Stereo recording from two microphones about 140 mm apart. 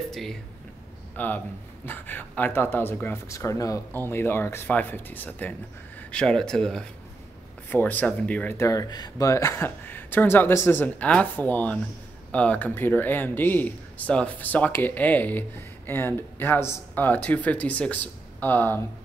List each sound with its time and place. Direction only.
0.1 s speech: centre (ahead or behind)
1.1 s speech: 15° left (ahead or behind)